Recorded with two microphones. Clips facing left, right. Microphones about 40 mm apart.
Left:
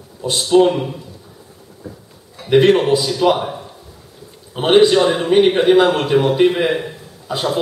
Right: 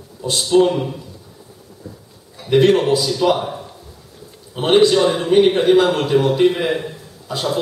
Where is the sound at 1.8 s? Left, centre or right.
Left.